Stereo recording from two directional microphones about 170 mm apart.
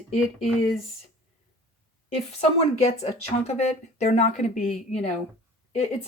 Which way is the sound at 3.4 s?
40° left (ahead or behind).